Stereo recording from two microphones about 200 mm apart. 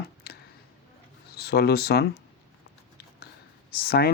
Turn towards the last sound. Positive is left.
turn(degrees=50)  # may be behind; listen again after turning